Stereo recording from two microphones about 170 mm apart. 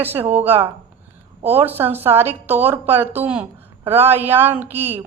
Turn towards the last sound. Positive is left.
turn(degrees=-10)  # may be behind; listen again after turning